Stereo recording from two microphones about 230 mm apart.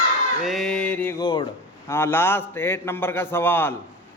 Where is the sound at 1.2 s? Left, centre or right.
Left.